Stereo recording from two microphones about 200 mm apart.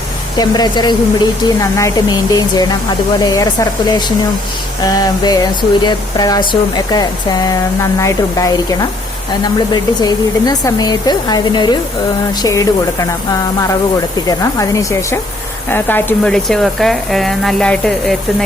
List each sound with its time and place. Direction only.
0.3 s a sound: 20° left (ahead or behind)
12.4 s speech: 15° left (ahead or behind)
14.3 s speech: 15° left (ahead or behind)